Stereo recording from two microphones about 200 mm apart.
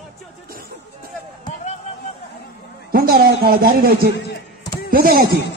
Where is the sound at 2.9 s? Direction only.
50° right (ahead or behind).